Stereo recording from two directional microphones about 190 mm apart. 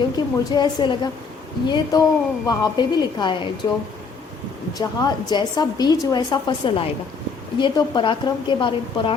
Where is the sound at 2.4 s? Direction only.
20° left (ahead or behind).